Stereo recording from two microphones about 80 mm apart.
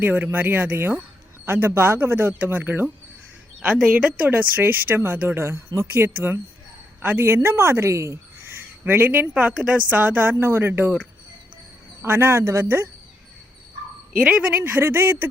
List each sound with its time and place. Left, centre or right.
0.0 s speech: right
3.6 s a woman's voice: centre
12.0 s speech: right
14.3 s speech: centre